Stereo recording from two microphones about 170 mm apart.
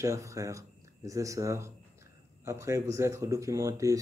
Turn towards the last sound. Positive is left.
turn(degrees=-20)  # may be behind; listen again after turning